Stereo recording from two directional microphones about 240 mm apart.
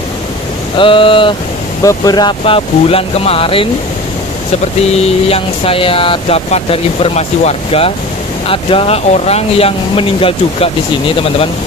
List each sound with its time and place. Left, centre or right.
0.7 s speech: left
4.9 s speech: left